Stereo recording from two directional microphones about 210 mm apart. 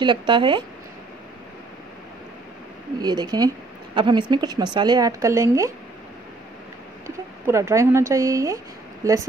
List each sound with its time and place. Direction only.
0.0 s speech: 25° right (ahead or behind)
3.0 s speech: 20° right (ahead or behind)
7.1 s speech: 15° right (ahead or behind)